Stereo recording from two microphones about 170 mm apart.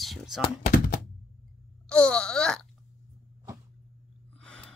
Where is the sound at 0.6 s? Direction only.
60° left (ahead or behind).